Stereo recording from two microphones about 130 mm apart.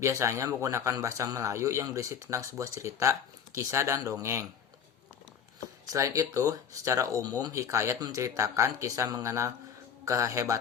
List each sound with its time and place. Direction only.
0.0 s speech: 20° right (ahead or behind)
5.9 s speech: 25° right (ahead or behind)